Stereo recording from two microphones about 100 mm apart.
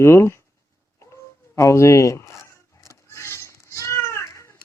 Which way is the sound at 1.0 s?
30° left (ahead or behind).